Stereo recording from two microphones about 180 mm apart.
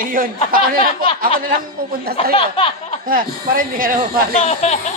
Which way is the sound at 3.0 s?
50° right (ahead or behind).